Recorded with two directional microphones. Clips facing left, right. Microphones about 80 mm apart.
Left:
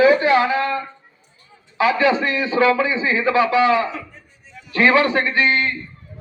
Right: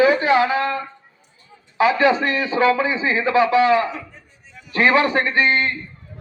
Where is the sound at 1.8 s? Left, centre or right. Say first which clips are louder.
Right 1 dB; right.